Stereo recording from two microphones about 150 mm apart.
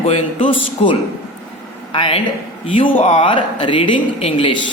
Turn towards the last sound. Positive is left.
turn(degrees=35)  # may be behind; listen again after turning